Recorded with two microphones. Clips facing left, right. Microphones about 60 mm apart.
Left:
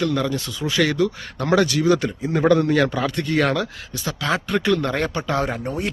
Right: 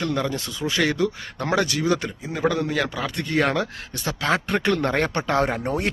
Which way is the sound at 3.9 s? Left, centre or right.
Right.